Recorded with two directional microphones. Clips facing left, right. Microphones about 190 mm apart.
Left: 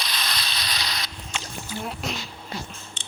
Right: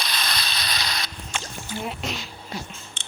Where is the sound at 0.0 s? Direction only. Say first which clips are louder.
Right 2 dB; 50° right (ahead or behind).